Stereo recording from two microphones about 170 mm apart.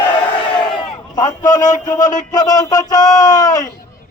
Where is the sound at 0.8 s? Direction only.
20° left (ahead or behind).